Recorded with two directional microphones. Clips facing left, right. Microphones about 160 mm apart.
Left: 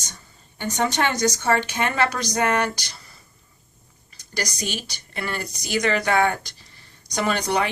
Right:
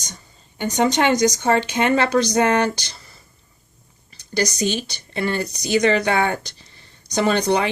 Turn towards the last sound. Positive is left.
turn(degrees=-25)  # may be behind; listen again after turning